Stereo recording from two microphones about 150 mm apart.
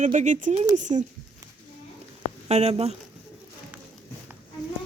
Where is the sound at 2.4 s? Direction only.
45° right (ahead or behind).